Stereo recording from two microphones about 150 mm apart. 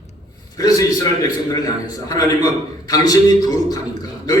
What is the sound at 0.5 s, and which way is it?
A man's voice, 25° left (ahead or behind).